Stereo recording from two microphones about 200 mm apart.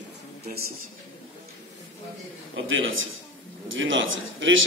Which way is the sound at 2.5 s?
75° right (ahead or behind).